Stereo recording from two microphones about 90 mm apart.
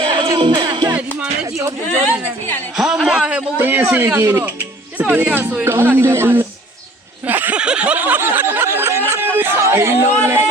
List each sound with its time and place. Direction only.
0.0 s music: 70° right (ahead or behind)
2.7 s a man's voice: 5° right (ahead or behind); by 4.5 s 30° right (ahead or behind)
4.9 s speech: 20° right (ahead or behind)
7.3 s snicker: 20° right (ahead or behind)
9.6 s speech: 30° right (ahead or behind)